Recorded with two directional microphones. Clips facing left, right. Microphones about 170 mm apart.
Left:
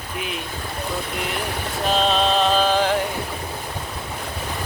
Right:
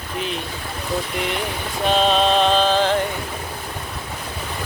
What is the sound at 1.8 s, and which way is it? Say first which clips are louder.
Music: right 3 dB; centre (ahead or behind).